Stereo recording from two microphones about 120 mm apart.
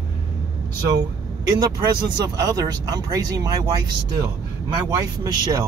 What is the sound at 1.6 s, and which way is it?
Speech, 35° right (ahead or behind).